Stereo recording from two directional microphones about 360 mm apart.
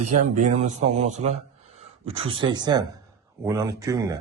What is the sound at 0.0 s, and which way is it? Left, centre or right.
A man's voice, right.